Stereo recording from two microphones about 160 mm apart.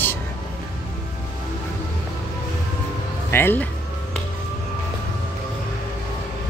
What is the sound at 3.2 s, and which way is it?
Speech, 15° left (ahead or behind).